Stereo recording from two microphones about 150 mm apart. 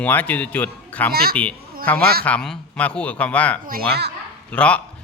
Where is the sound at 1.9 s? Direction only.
10° left (ahead or behind).